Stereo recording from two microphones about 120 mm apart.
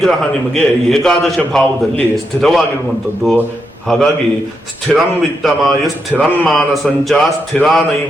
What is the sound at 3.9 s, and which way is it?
A man's voice, 5° left (ahead or behind).